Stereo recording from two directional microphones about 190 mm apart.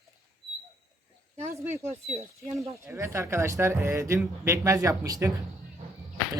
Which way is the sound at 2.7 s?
15° right (ahead or behind).